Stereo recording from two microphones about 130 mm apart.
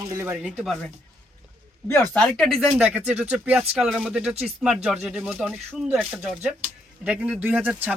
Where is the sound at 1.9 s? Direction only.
10° left (ahead or behind).